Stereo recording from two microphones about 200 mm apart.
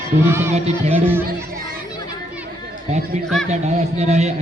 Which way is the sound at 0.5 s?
30° right (ahead or behind).